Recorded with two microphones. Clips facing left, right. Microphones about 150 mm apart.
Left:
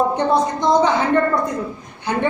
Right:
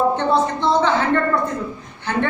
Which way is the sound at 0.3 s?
15° left (ahead or behind).